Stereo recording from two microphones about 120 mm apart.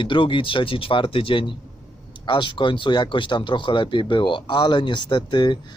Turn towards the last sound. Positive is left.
turn(degrees=40)  # may be behind; listen again after turning